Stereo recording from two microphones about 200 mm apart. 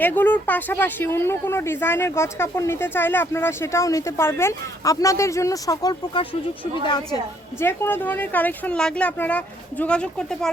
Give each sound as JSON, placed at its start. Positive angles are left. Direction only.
{"t": 0.0, "sound": "a woman's voice", "side_deg": 10}
{"t": 7.6, "sound": "speech", "side_deg": 10}